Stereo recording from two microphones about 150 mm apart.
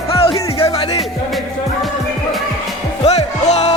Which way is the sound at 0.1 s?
40° left (ahead or behind).